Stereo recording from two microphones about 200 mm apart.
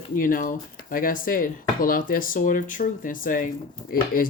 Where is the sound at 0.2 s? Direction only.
45° left (ahead or behind).